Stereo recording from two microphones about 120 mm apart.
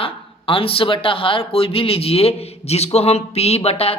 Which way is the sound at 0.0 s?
50° left (ahead or behind).